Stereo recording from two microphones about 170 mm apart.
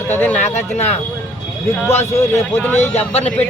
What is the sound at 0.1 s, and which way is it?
Speech, 10° left (ahead or behind).